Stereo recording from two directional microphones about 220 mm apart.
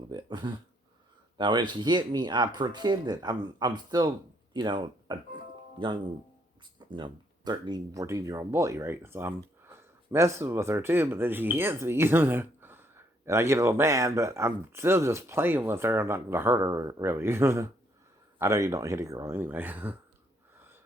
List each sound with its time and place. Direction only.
0.1 s speech: 20° right (ahead or behind)
6.7 s speech: 20° right (ahead or behind)